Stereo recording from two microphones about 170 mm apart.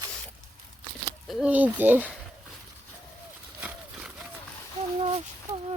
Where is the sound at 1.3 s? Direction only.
5° right (ahead or behind).